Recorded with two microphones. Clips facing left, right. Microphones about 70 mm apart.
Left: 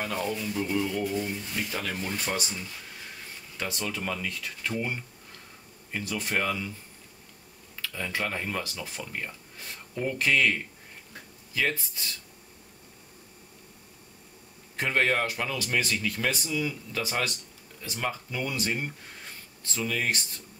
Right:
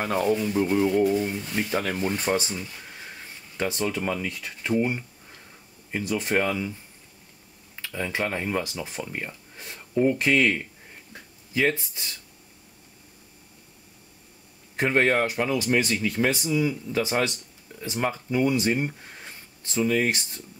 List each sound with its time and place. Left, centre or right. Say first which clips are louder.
0.0 s speech: right 7 dB; right; by 6.7 s centre
7.8 s speech: right 4 dB; right
14.8 s speech: right 4 dB; right